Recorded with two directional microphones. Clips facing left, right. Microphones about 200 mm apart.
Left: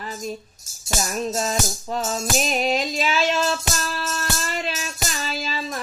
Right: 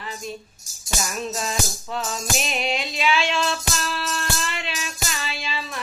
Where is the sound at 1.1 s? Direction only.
40° left (ahead or behind).